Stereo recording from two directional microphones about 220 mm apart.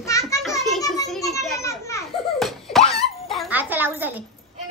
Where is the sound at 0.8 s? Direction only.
15° left (ahead or behind).